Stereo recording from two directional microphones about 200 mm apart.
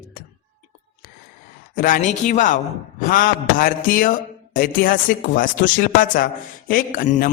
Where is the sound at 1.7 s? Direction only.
45° left (ahead or behind).